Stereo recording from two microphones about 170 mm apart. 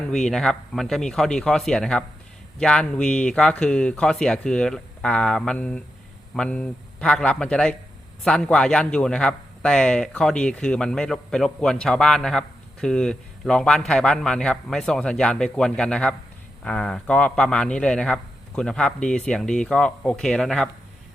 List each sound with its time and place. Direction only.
0.1 s speech: 5° left (ahead or behind)